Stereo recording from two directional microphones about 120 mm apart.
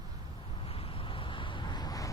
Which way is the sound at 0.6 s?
50° left (ahead or behind).